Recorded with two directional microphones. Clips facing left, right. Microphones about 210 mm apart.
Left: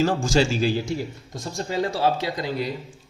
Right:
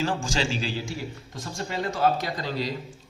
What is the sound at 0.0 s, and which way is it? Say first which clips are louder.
Speech: left 7 dB; 40° left (ahead or behind).